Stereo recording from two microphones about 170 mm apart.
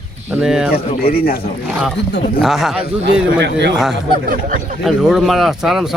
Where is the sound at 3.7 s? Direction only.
Centre (ahead or behind).